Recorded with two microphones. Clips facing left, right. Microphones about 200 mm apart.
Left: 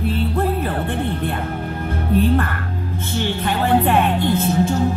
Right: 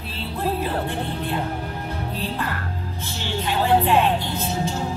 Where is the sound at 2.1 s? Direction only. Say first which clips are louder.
Left 13 dB; 55° left (ahead or behind).